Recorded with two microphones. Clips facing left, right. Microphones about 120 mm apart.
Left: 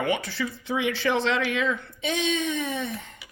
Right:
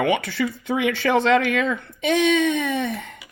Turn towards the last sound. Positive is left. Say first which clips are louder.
# right 6 dB
turn(degrees=-60)  # may be behind; listen again after turning